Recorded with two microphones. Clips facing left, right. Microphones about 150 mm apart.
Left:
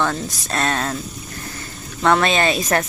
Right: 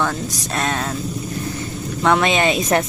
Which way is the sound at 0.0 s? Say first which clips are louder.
Even; 10° right (ahead or behind).